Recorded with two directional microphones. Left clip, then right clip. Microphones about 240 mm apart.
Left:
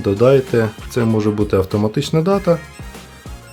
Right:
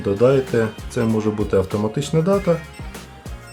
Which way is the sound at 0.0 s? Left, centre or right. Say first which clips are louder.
Left 3 dB; left.